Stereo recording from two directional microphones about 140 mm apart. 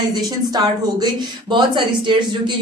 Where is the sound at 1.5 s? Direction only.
35° right (ahead or behind).